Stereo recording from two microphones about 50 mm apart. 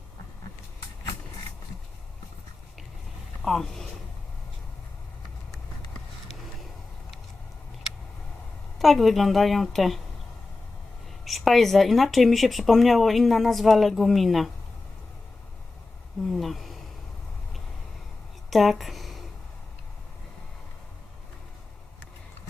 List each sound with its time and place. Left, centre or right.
3.4 s speech: centre
8.8 s speech: centre
11.3 s speech: centre
16.3 s a sound: centre
18.5 s speech: centre